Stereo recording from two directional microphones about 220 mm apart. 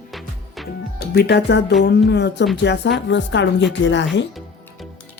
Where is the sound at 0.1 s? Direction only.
Centre (ahead or behind).